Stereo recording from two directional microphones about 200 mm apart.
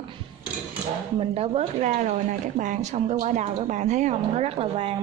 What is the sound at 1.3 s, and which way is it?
Speech, 30° right (ahead or behind).